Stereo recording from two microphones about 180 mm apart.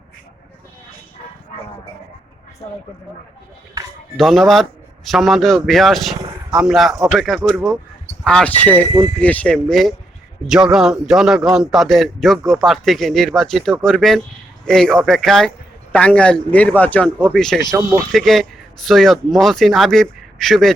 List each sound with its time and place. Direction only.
2.6 s speech: 25° left (ahead or behind)
4.2 s a man's voice: centre (ahead or behind)